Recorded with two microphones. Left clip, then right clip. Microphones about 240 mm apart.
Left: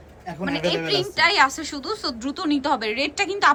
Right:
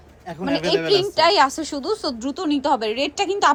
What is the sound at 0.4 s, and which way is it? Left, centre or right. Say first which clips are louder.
A woman's voice: right 4 dB; centre.